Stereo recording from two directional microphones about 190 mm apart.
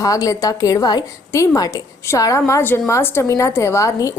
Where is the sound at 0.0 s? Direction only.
20° left (ahead or behind).